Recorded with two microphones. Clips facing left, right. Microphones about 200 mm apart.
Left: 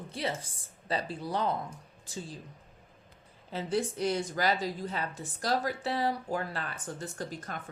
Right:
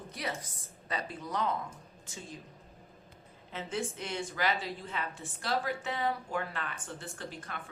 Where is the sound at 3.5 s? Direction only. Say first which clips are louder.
Left 5 dB; 35° left (ahead or behind).